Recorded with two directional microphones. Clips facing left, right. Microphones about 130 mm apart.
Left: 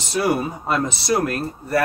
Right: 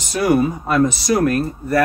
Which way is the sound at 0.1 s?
25° left (ahead or behind).